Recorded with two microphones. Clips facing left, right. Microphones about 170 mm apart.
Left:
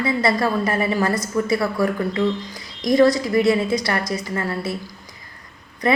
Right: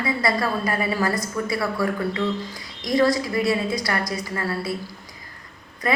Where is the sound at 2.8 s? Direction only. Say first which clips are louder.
Left 4 dB; 20° left (ahead or behind).